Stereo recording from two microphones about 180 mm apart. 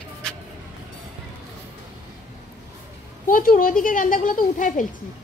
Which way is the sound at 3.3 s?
50° left (ahead or behind).